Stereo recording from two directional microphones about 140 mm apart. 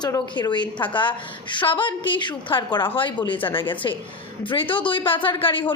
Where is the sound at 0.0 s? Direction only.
30° left (ahead or behind).